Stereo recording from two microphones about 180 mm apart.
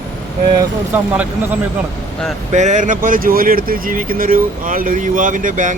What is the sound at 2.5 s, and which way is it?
Speech, 40° right (ahead or behind).